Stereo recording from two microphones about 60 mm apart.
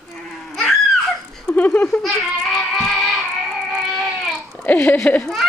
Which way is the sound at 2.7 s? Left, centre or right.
Centre.